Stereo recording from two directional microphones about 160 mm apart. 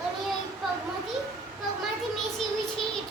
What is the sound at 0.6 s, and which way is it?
Speech, centre (ahead or behind).